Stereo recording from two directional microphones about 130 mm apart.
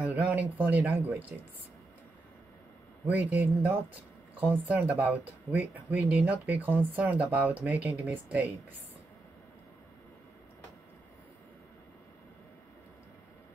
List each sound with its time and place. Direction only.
0.0 s speech: 10° right (ahead or behind)
3.1 s speech: 10° right (ahead or behind)